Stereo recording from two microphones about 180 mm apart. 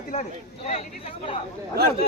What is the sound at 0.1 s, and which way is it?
Speech, 40° left (ahead or behind).